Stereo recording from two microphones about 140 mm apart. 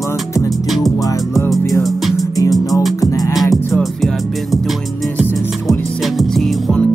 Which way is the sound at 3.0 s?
25° left (ahead or behind).